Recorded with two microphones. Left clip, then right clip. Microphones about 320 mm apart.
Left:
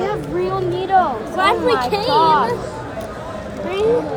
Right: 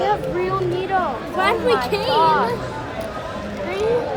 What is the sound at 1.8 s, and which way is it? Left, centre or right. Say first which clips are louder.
Speech: left 3 dB; centre.